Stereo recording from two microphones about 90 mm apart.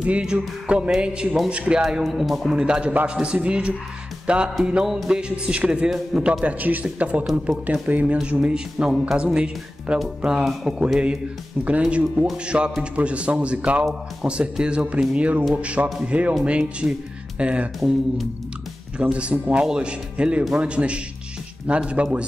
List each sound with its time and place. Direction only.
0.0 s speech: 10° right (ahead or behind)
2.5 s speech: 10° right (ahead or behind)
17.7 s speech: centre (ahead or behind)
18.9 s speech: 10° right (ahead or behind)